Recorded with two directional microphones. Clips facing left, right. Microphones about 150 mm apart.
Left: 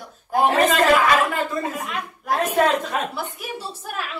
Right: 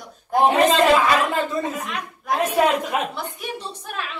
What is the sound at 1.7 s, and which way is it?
Speech, centre (ahead or behind).